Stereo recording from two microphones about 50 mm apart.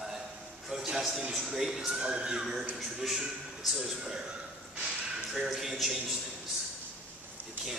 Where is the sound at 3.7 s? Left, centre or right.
Centre.